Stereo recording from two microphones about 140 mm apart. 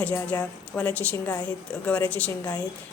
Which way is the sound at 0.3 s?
10° left (ahead or behind).